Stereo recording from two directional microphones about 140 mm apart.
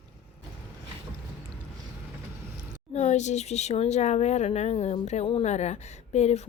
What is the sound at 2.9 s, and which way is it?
A woman's voice, 55° left (ahead or behind).